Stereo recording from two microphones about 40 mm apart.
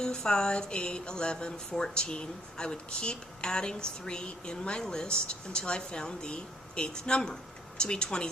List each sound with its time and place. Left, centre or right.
0.0 s speech: centre